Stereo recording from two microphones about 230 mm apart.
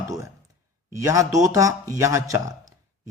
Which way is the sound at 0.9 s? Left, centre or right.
Centre.